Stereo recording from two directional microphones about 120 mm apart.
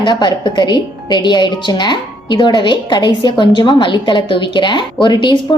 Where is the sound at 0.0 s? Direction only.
40° left (ahead or behind).